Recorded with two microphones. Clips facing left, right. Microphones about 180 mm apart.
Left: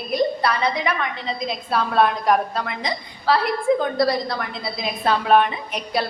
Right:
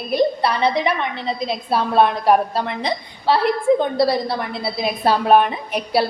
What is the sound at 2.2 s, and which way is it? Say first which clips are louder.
A woman's voice: right 4 dB; 30° right (ahead or behind).